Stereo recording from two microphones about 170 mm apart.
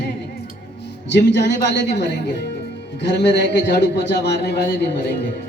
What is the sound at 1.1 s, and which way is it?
A man's voice, 90° left.